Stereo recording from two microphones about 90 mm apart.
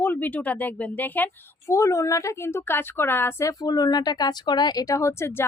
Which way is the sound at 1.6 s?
35° left (ahead or behind).